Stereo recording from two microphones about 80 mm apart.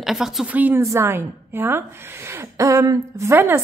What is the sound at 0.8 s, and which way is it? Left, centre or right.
Speech, right.